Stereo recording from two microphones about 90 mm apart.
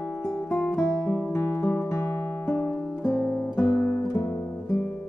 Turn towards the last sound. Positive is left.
turn(degrees=35)  # may be behind; listen again after turning